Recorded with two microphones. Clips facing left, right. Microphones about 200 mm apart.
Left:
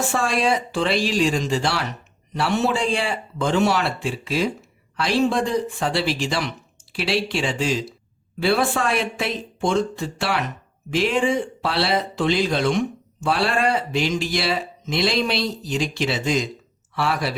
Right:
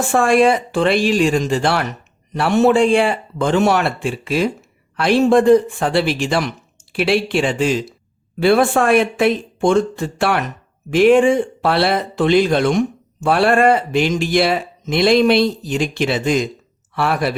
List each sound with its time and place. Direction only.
0.1 s speech: 55° right (ahead or behind)